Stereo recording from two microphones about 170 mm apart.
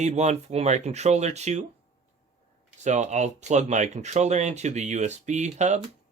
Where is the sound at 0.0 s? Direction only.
40° right (ahead or behind).